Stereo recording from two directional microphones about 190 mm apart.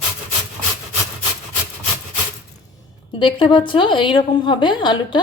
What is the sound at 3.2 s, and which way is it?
A woman's voice, 25° left (ahead or behind).